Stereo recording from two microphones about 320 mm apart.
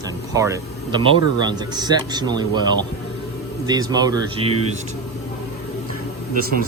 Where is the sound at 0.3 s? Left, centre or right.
Centre.